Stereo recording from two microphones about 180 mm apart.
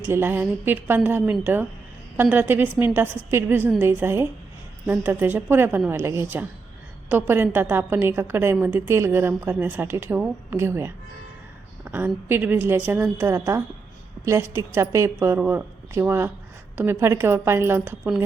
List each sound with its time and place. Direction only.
0.0 s a woman's voice: 15° right (ahead or behind)